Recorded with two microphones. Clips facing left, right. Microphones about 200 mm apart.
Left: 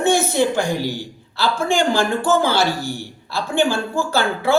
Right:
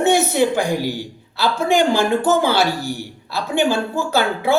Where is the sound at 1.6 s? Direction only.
20° right (ahead or behind).